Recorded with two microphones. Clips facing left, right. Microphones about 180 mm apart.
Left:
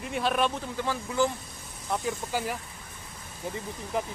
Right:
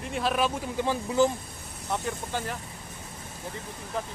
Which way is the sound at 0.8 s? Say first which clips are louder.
Right 4 dB; 20° right (ahead or behind).